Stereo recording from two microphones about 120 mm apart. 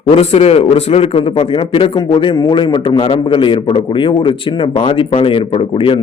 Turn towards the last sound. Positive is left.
turn(degrees=45)  # may be behind; listen again after turning